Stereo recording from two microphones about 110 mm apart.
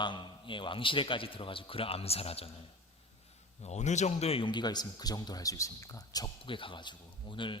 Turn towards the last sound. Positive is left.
turn(degrees=50)  # may be behind; listen again after turning